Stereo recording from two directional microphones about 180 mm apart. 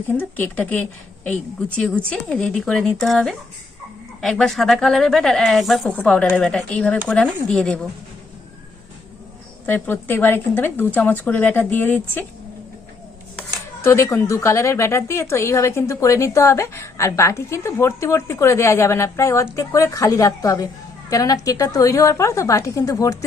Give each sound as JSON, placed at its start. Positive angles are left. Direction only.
{"t": 0.1, "sound": "a woman's voice", "side_deg": 10}
{"t": 9.6, "sound": "a woman's voice", "side_deg": 10}
{"t": 13.8, "sound": "a woman's voice", "side_deg": 15}